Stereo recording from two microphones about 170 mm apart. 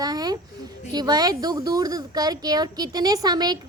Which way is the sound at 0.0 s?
25° right (ahead or behind).